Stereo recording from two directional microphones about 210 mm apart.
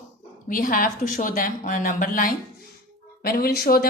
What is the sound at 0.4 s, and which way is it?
A woman's voice, 40° left (ahead or behind).